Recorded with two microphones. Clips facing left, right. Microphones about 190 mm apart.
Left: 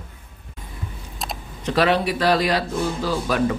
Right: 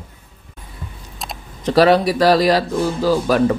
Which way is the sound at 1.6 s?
40° right (ahead or behind).